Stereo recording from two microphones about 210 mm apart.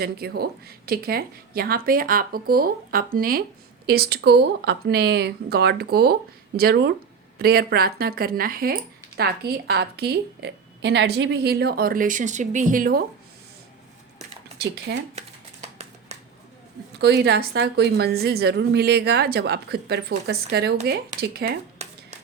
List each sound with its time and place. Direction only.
0.0 s speech: 50° right (ahead or behind)
14.9 s speech: 55° right (ahead or behind)
17.0 s speech: 55° right (ahead or behind)
21.8 s a sound: 30° right (ahead or behind)